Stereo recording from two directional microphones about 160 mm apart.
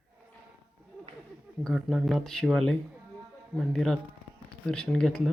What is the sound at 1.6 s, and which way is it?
Speech, centre (ahead or behind).